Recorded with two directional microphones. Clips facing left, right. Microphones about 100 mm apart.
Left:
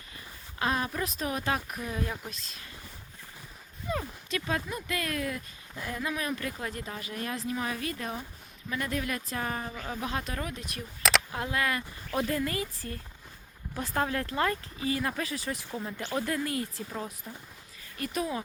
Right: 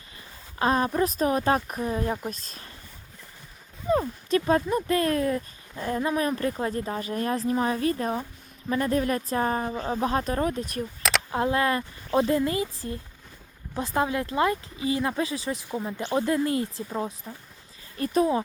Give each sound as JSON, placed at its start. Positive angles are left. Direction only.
{"t": 0.6, "sound": "speech", "side_deg": -35}
{"t": 3.8, "sound": "speech", "side_deg": -35}